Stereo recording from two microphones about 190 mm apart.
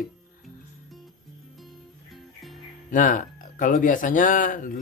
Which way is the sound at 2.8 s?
45° left (ahead or behind).